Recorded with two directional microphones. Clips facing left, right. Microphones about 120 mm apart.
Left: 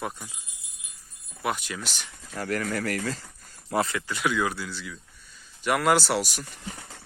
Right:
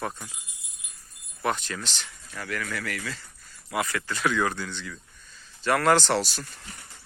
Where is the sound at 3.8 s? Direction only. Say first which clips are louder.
Even; 15° left (ahead or behind).